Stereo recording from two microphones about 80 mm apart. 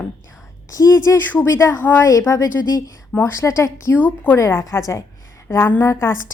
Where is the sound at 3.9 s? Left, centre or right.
Left.